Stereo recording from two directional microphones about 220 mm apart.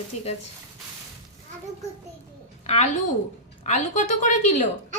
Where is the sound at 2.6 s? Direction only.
30° left (ahead or behind).